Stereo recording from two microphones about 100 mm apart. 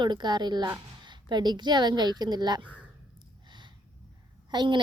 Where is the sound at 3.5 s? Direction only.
50° right (ahead or behind).